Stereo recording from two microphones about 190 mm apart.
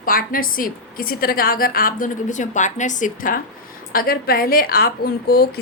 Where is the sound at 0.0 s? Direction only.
50° left (ahead or behind).